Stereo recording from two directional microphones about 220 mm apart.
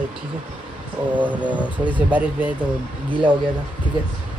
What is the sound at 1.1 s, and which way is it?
Speech, 5° right (ahead or behind).